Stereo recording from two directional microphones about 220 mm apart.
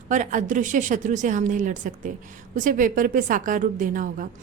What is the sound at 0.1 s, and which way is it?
A woman's voice, 35° right (ahead or behind).